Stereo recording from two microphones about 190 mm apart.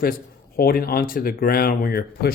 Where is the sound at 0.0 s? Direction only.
50° left (ahead or behind).